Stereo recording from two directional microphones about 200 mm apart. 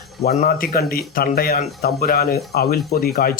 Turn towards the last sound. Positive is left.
turn(degrees=50)  # may be behind; listen again after turning